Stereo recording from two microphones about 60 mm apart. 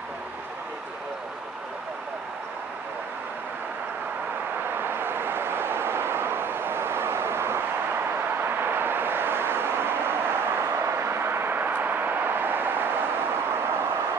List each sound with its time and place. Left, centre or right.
4.7 s vehicle: right
13.6 s vehicle: right